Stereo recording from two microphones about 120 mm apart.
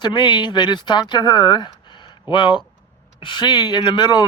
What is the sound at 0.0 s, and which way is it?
Speech, 40° left (ahead or behind).